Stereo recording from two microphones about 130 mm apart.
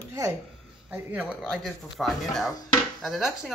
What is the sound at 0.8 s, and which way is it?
Speech, 10° right (ahead or behind).